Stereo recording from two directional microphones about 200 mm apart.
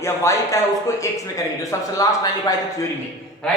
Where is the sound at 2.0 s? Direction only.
15° left (ahead or behind).